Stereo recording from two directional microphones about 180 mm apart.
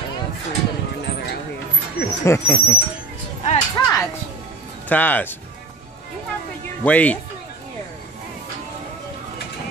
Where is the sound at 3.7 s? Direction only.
15° left (ahead or behind).